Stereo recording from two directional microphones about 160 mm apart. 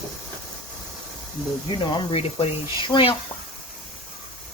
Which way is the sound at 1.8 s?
35° left (ahead or behind).